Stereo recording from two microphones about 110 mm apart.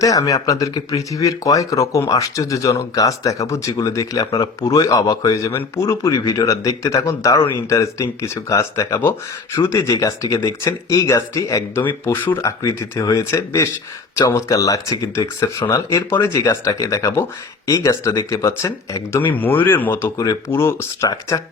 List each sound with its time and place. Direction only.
0.0 s speech: 30° left (ahead or behind)
11.8 s speech: 20° left (ahead or behind)
12.4 s speech: 30° left (ahead or behind)
19.3 s speech: 15° left (ahead or behind)